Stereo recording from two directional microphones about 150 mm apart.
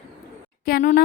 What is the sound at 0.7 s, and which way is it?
Speech, 85° left.